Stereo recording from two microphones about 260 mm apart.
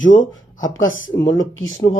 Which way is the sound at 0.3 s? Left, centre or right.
Left.